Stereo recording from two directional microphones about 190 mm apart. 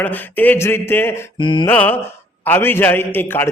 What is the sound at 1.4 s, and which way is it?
Mantra, 25° left (ahead or behind).